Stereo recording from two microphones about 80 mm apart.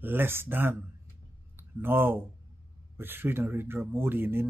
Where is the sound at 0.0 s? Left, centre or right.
Right.